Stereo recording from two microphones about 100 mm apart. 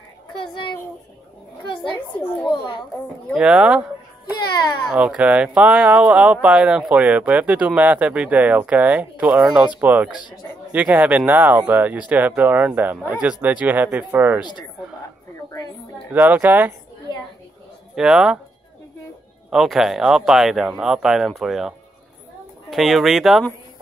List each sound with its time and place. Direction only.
0.3 s a child's voice: 55° left (ahead or behind)
2.0 s a child's voice: 20° left (ahead or behind)
2.4 s a child's voice: 50° left (ahead or behind)
3.3 s speech: 10° right (ahead or behind)
4.9 s speech: 10° right (ahead or behind)
14.4 s a child's voice: 45° left (ahead or behind)
16.1 s speech: 15° right (ahead or behind)
17.9 s speech: 5° right (ahead or behind)
19.5 s speech: centre (ahead or behind)